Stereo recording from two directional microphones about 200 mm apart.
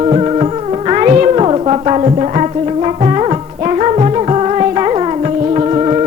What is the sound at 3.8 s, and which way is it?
Music, 30° right (ahead or behind).